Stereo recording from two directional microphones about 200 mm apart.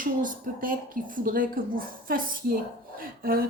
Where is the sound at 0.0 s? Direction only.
40° right (ahead or behind).